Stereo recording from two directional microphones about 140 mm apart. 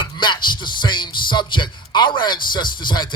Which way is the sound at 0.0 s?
35° left (ahead or behind).